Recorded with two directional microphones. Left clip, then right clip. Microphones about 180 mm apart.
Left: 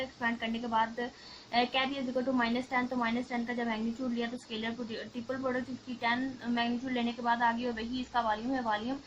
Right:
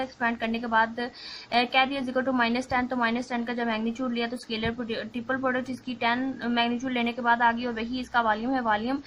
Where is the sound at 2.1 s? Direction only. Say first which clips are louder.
Right 4 dB; 40° right (ahead or behind).